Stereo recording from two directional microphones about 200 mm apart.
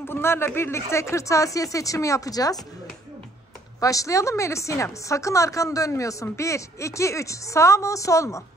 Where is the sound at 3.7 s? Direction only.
15° left (ahead or behind).